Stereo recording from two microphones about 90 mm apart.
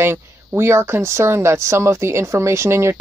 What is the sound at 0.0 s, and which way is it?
Speech, 30° right (ahead or behind).